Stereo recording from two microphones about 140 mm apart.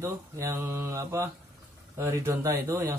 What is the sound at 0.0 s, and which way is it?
Speech, 20° right (ahead or behind).